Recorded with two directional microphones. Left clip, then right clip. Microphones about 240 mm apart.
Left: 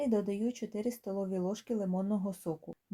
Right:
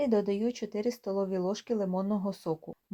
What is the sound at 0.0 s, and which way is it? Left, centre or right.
Speech, centre.